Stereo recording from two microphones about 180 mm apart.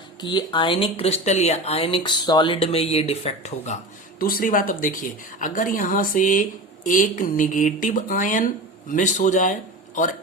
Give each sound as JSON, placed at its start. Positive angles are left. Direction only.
{"t": 0.2, "sound": "speech", "side_deg": 25}
{"t": 4.2, "sound": "speech", "side_deg": 55}